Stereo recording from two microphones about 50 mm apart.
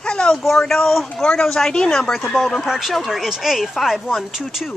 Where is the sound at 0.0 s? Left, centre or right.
Centre.